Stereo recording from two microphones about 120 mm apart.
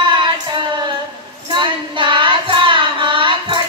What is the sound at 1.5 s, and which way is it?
Child singing, 40° right (ahead or behind).